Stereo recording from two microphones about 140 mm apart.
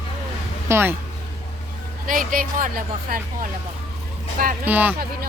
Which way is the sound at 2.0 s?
80° right.